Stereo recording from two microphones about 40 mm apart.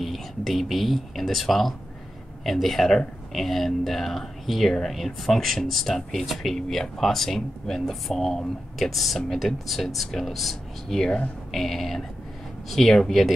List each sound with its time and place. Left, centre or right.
0.0 s speech: centre